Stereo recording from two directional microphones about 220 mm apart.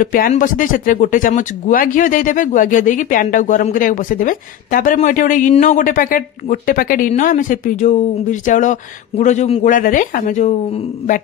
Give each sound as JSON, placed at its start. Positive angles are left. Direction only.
{"t": 0.0, "sound": "speech", "side_deg": 40}